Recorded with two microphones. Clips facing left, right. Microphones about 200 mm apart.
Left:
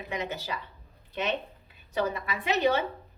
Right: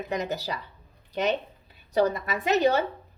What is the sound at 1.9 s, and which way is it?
Speech, 40° right (ahead or behind).